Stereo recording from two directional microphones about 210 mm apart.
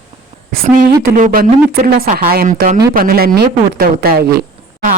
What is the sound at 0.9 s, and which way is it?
Speech, 40° right (ahead or behind).